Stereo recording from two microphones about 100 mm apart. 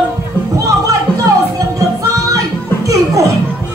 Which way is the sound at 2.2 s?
35° right (ahead or behind).